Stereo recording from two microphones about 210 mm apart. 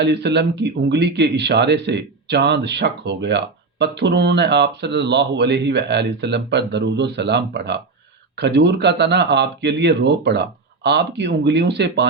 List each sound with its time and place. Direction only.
0.0 s speech: 55° right (ahead or behind)